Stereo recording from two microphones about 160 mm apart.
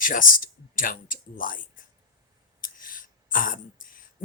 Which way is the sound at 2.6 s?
60° left (ahead or behind).